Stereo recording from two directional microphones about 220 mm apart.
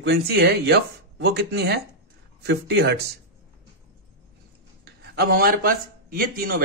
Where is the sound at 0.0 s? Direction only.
50° right (ahead or behind).